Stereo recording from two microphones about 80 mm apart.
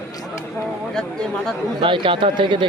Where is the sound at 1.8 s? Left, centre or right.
Right.